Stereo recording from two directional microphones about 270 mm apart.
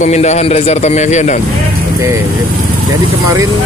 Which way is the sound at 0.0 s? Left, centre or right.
Left.